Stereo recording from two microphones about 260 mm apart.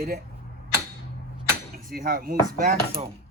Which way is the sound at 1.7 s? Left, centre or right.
Right.